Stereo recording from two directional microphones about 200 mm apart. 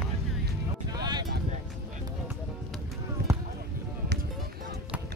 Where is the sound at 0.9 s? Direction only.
20° right (ahead or behind).